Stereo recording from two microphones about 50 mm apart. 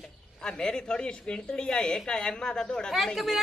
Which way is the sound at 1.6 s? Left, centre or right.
Centre.